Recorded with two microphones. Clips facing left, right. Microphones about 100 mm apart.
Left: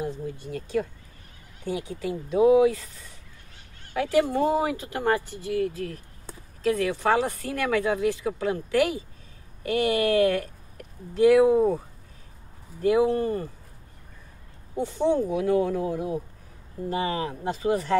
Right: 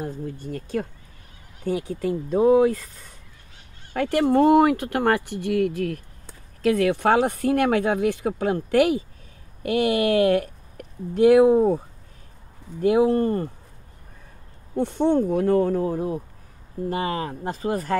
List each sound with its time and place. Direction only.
0.0 s speech: 45° right (ahead or behind)
12.8 s speech: 50° right (ahead or behind)
14.8 s speech: 55° right (ahead or behind)